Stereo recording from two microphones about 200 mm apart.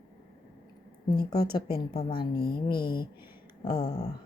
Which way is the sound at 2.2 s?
50° left (ahead or behind).